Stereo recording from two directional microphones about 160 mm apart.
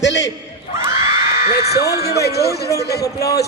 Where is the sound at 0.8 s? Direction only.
20° right (ahead or behind).